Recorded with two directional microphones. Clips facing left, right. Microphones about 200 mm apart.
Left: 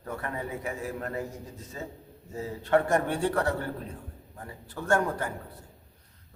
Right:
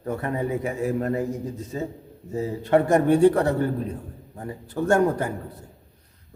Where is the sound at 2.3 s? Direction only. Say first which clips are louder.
Right 5 dB; 15° right (ahead or behind).